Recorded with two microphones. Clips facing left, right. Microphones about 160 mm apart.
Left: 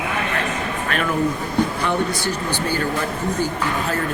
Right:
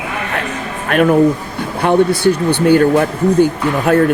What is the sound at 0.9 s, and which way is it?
Speech, 50° right (ahead or behind).